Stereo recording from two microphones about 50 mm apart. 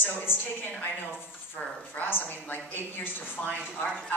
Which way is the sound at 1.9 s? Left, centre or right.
Left.